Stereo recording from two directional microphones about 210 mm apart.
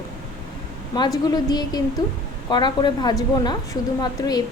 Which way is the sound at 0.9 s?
20° left (ahead or behind).